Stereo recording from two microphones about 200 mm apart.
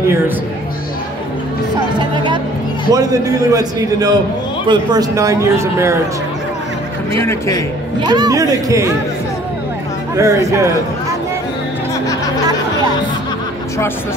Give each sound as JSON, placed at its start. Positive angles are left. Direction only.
{"t": 2.0, "sound": "music", "side_deg": -25}
{"t": 2.9, "sound": "a man's voice", "side_deg": -15}
{"t": 7.2, "sound": "a man's voice", "side_deg": 15}
{"t": 8.0, "sound": "a man's voice", "side_deg": -20}
{"t": 10.1, "sound": "a man's voice", "side_deg": -15}